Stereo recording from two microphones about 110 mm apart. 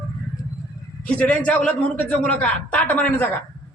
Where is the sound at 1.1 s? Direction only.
10° left (ahead or behind).